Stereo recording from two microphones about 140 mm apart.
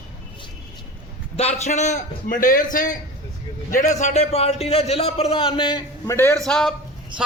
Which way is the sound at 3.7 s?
60° left (ahead or behind).